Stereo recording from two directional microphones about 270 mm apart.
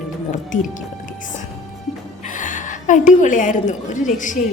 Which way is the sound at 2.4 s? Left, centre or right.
Left.